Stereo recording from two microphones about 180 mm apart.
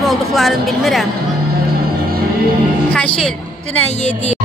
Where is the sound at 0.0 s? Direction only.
Centre (ahead or behind).